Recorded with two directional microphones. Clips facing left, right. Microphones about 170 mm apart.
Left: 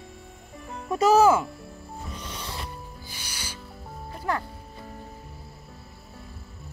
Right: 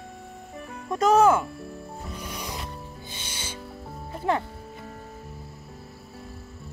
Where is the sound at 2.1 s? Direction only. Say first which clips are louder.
Right 2 dB; 10° right (ahead or behind).